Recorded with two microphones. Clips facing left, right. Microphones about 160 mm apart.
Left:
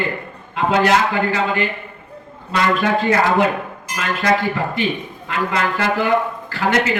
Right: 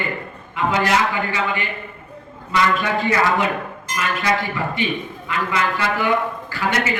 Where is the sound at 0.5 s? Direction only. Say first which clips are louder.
Left 3 dB; 65° left (ahead or behind).